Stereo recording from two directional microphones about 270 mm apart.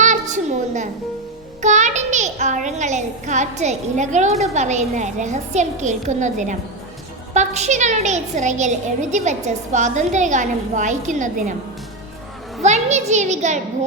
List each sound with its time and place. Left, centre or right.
0.0 s a sound: right
1.6 s a woman's voice: right
12.6 s a child's voice: right